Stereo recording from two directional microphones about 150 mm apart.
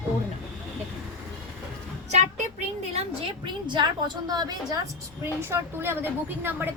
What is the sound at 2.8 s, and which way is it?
Speech, 45° right (ahead or behind).